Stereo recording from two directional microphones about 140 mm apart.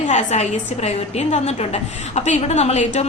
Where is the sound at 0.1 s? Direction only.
55° left (ahead or behind).